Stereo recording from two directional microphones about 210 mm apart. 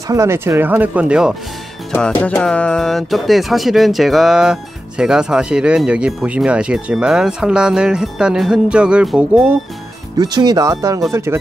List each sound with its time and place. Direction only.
0.1 s speech: 15° right (ahead or behind)
2.0 s speech: 5° left (ahead or behind)
10.1 s speech: 20° right (ahead or behind)